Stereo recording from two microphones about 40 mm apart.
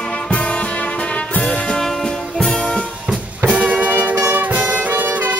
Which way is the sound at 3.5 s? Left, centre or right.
Right.